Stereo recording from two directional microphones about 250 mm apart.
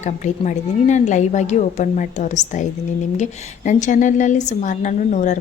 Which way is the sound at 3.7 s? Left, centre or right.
Left.